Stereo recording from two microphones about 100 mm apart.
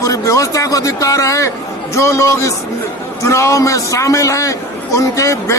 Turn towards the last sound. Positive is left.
turn(degrees=30)  # may be behind; listen again after turning